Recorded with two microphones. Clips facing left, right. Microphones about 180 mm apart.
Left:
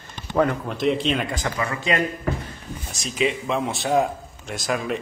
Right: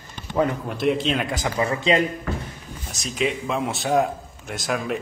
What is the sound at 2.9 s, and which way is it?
Speech, centre (ahead or behind).